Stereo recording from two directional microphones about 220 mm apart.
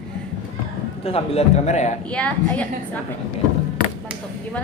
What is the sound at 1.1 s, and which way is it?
Speech, 25° left (ahead or behind).